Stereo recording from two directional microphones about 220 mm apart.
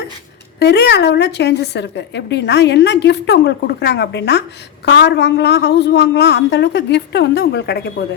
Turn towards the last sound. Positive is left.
turn(degrees=50)  # may be behind; listen again after turning